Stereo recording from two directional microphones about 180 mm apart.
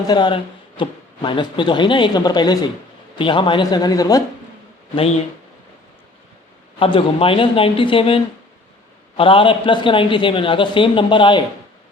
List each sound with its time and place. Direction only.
0.1 s speech: 25° left (ahead or behind)
6.7 s speech: 30° left (ahead or behind)